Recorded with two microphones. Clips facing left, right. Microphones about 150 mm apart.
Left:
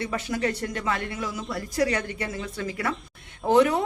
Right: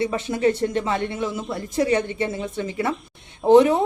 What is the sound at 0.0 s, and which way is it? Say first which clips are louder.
Speech: right 6 dB; 25° right (ahead or behind).